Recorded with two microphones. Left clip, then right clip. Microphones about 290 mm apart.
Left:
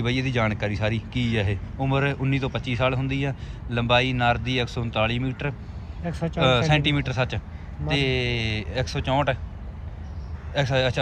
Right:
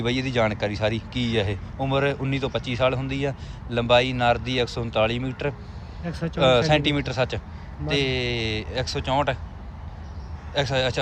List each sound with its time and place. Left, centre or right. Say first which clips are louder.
0.0 s speech: right 2 dB; centre
6.1 s speech: left 1 dB; centre
6.4 s speech: right 2 dB; centre
10.5 s speech: even; centre